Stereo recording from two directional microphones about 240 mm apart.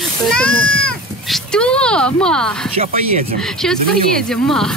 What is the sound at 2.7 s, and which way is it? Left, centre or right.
Speech, right.